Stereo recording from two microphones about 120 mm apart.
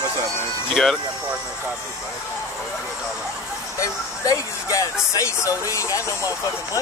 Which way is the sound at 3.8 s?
25° left (ahead or behind).